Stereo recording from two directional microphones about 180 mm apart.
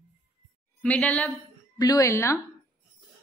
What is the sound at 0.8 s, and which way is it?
Speech, 10° left (ahead or behind).